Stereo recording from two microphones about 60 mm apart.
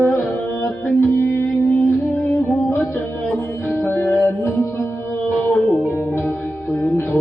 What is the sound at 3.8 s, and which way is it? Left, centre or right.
Music, left.